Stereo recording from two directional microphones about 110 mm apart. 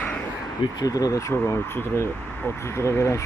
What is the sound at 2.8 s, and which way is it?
Speech, 25° left (ahead or behind).